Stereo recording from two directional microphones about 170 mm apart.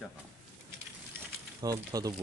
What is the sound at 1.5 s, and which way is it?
Speech, 20° right (ahead or behind).